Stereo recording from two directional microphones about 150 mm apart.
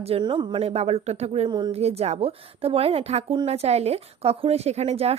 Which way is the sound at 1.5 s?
30° right (ahead or behind).